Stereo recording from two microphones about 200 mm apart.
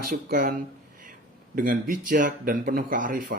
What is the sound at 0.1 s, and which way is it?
Speech, 45° right (ahead or behind).